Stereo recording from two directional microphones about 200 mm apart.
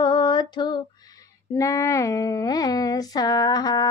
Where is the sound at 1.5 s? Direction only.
15° left (ahead or behind).